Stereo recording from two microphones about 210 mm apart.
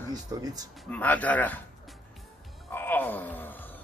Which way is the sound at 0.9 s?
5° left (ahead or behind).